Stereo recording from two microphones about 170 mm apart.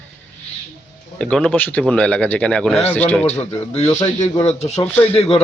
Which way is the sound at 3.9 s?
20° left (ahead or behind).